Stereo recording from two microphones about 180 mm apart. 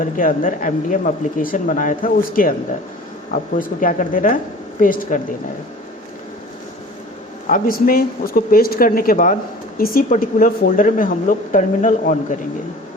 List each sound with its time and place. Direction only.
0.0 s speech: 45° left (ahead or behind)
7.4 s speech: 50° left (ahead or behind)